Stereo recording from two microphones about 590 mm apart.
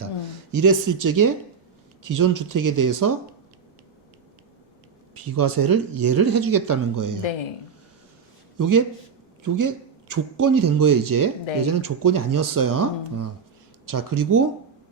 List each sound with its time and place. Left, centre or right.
0.5 s speech: right
5.1 s speech: right
8.5 s a man's voice: right